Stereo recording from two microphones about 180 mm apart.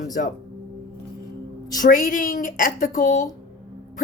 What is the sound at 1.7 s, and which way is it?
A woman's voice, 45° left (ahead or behind).